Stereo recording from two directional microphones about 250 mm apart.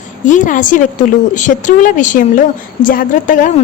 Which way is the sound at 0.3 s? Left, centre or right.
Left.